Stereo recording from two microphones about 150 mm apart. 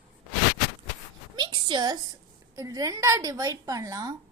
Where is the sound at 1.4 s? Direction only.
30° right (ahead or behind).